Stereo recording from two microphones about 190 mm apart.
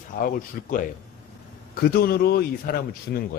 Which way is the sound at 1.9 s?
55° left (ahead or behind).